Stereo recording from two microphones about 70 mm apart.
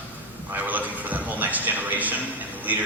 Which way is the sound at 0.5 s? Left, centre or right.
Right.